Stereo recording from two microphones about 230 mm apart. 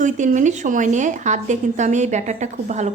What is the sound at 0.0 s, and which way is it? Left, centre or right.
A woman's voice, right.